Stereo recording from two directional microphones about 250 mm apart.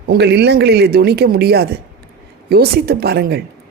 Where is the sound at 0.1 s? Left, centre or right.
Right.